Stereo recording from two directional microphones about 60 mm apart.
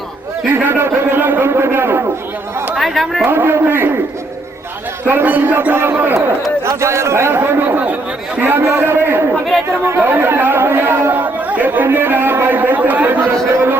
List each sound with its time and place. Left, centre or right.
0.5 s a man's voice: right
2.7 s speech: centre
3.2 s a man's voice: right
5.0 s a man's voice: right
6.7 s a man's voice: right